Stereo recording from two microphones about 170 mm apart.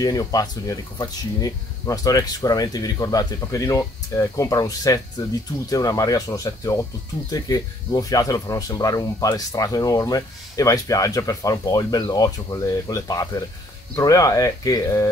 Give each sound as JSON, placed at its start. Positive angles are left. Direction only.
{"t": 0.0, "sound": "speech", "side_deg": 20}